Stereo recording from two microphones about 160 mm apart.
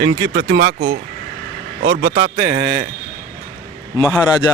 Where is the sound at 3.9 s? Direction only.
20° left (ahead or behind).